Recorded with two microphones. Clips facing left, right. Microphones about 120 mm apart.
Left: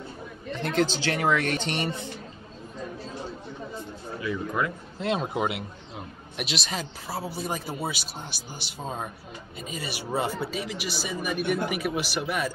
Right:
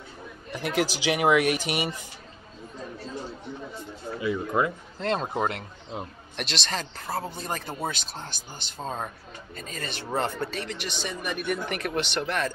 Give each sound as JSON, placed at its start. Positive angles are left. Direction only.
{"t": 0.5, "sound": "speech", "side_deg": -10}
{"t": 4.2, "sound": "speech", "side_deg": -25}
{"t": 4.9, "sound": "speech", "side_deg": 5}